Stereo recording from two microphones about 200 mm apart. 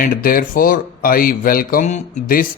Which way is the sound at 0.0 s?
45° left (ahead or behind).